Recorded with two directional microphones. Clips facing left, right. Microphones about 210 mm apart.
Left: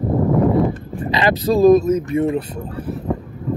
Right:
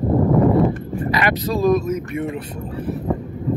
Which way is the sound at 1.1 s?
30° left (ahead or behind).